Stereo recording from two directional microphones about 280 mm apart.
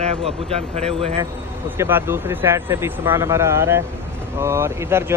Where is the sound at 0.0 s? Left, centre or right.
Right.